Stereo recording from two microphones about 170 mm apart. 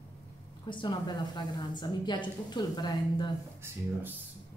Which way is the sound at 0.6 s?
25° left (ahead or behind).